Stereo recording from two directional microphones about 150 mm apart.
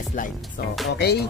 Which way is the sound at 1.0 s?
90° left.